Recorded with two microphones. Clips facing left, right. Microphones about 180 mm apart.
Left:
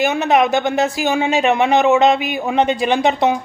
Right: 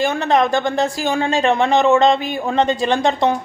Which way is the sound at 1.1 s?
15° left (ahead or behind).